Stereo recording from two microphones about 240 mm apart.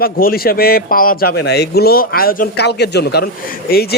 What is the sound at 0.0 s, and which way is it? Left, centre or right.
Speech, left.